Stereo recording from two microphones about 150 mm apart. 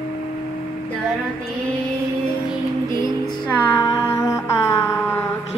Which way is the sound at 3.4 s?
15° left (ahead or behind).